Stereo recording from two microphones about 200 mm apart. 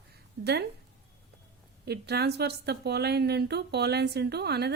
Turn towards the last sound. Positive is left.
turn(degrees=-55)  # may be behind; listen again after turning